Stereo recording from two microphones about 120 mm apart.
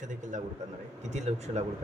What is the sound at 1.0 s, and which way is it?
Speech, 70° right (ahead or behind).